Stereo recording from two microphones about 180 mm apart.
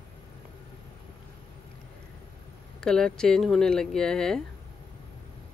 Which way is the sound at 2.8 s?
5° left (ahead or behind).